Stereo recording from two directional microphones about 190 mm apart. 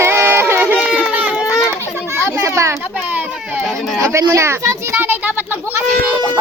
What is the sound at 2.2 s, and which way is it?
Children playing, 15° right (ahead or behind).